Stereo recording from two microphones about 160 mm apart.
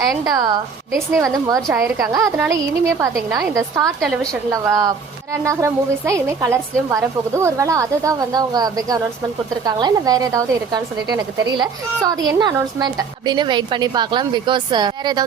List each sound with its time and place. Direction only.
0.3 s speech: 25° right (ahead or behind)